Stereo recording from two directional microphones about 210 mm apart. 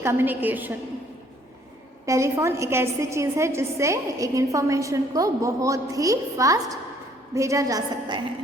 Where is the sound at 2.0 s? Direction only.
15° right (ahead or behind).